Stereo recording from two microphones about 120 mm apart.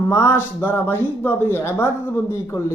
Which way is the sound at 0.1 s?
20° left (ahead or behind).